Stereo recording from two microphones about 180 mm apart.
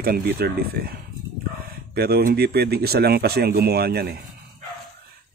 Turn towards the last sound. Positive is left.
turn(degrees=-60)  # may be behind; listen again after turning